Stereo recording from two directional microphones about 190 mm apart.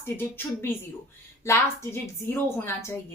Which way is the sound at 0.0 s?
10° left (ahead or behind).